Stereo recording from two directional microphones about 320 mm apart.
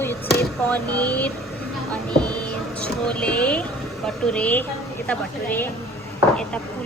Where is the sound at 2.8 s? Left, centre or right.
Centre.